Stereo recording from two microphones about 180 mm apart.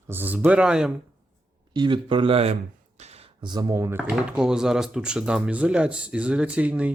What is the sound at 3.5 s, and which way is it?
Speech, 20° right (ahead or behind).